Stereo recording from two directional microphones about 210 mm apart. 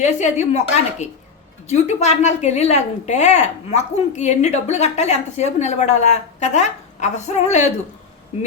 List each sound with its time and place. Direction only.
0.0 s a woman's voice: 35° left (ahead or behind)